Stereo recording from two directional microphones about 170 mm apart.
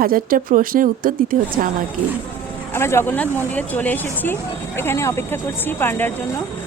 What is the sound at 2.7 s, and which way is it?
A woman's voice, 15° left (ahead or behind).